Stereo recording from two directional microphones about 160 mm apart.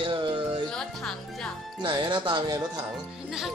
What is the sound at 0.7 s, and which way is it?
Speech, 5° left (ahead or behind).